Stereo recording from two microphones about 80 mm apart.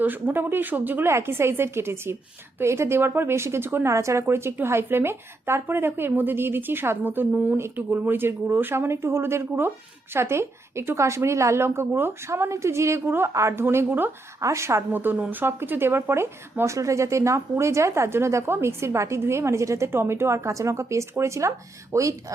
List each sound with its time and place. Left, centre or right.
0.0 s a woman's voice: right
3.9 s a woman's voice: right